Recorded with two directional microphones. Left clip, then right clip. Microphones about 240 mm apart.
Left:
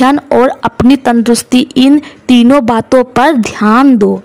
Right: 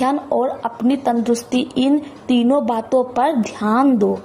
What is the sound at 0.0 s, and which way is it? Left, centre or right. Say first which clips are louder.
A woman's voice: left 10 dB; left.